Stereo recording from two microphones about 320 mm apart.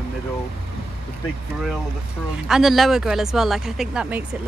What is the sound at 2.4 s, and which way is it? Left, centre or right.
Speech, centre.